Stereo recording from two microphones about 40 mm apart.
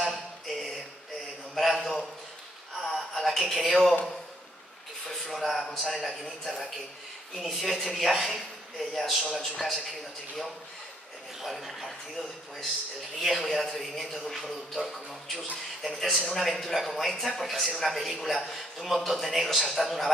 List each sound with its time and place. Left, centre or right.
0.1 s a sound: centre
3.3 s speech: centre
5.0 s a sound: centre
5.4 s a man's voice: centre
11.4 s a man's voice: centre
17.5 s a man's voice: centre